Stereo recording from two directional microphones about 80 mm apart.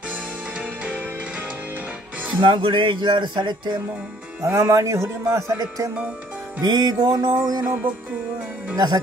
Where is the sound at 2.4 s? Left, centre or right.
Right.